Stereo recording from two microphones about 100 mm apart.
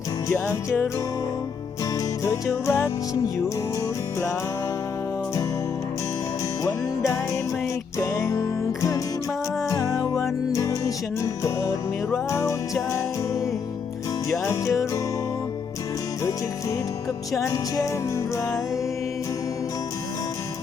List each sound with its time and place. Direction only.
0.3 s music: 30° left (ahead or behind)
2.2 s music: 30° left (ahead or behind)
6.7 s music: 30° left (ahead or behind)
14.3 s music: 30° left (ahead or behind)
17.3 s music: 35° left (ahead or behind)